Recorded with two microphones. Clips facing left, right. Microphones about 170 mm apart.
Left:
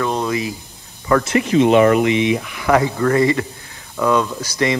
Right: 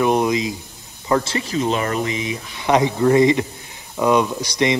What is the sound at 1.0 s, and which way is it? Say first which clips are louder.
Speech: left 4 dB; 25° right (ahead or behind).